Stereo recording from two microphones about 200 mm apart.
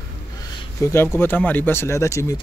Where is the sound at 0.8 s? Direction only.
10° left (ahead or behind).